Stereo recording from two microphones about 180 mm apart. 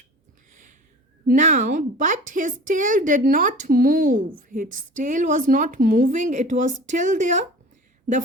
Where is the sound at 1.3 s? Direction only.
45° right (ahead or behind).